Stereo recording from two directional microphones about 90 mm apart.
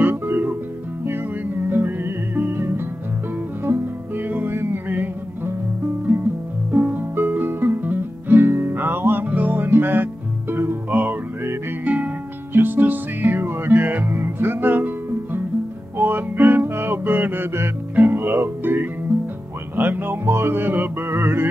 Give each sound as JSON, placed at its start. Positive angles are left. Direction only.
{"t": 0.0, "sound": "music", "side_deg": -25}
{"t": 1.7, "sound": "music", "side_deg": -25}
{"t": 6.7, "sound": "music", "side_deg": -20}
{"t": 16.0, "sound": "music", "side_deg": -20}